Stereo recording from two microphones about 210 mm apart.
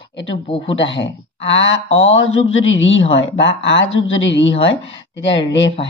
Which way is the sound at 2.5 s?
65° left (ahead or behind).